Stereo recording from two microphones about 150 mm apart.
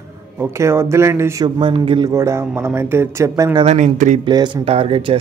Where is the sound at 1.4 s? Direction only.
30° right (ahead or behind).